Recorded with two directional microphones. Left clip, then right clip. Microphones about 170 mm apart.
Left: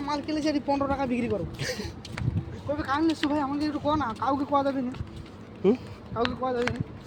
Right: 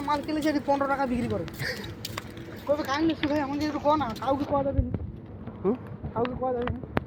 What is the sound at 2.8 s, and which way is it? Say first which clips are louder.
Speech: left 1 dB; 35° left (ahead or behind).